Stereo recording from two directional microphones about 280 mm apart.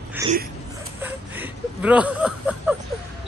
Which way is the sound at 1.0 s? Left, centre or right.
Centre.